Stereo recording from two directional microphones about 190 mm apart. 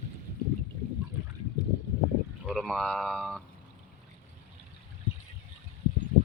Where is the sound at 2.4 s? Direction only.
Centre (ahead or behind).